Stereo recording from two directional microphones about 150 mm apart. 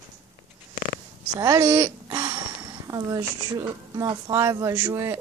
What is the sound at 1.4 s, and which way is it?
Speech, 20° right (ahead or behind).